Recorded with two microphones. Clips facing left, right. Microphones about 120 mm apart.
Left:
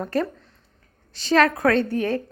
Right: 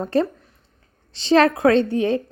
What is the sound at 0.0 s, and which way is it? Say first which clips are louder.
A woman's voice: right 4 dB; 25° right (ahead or behind).